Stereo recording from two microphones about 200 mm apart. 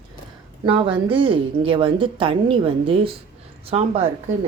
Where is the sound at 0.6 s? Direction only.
25° right (ahead or behind).